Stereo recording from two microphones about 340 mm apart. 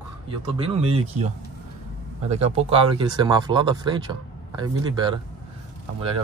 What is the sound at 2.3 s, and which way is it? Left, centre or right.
Speech, centre.